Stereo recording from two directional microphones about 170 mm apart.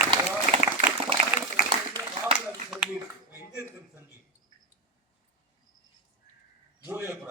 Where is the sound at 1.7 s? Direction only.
20° right (ahead or behind).